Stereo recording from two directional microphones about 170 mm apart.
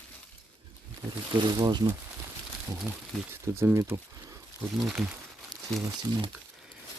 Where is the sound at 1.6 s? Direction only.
25° right (ahead or behind).